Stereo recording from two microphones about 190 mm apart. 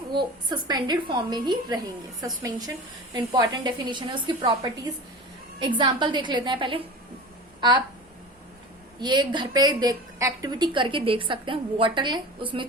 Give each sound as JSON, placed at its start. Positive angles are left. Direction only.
{"t": 0.1, "sound": "a woman's voice", "side_deg": -25}
{"t": 5.5, "sound": "a woman's voice", "side_deg": -25}
{"t": 9.0, "sound": "a woman's voice", "side_deg": -25}